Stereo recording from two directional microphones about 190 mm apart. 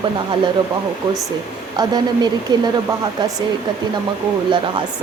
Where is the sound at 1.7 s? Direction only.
20° right (ahead or behind).